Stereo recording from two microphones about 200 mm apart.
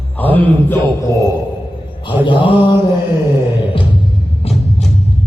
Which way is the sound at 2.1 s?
25° left (ahead or behind).